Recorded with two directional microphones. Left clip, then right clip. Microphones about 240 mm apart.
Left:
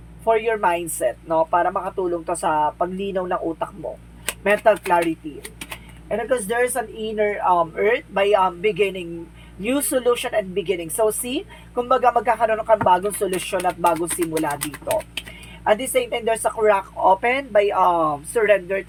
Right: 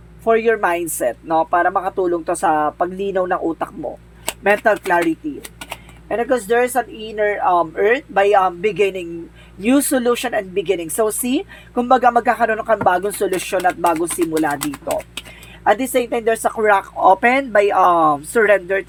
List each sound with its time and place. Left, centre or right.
0.3 s a woman's voice: right
6.1 s a woman's voice: right
14.6 s speech: centre
15.6 s a woman's voice: right